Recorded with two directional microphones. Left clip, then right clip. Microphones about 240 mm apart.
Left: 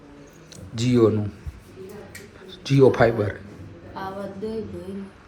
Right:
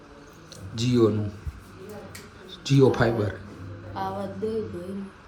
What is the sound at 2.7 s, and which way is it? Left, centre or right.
Speech, centre.